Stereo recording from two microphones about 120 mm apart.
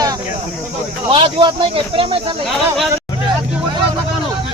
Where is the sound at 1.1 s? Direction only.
45° right (ahead or behind).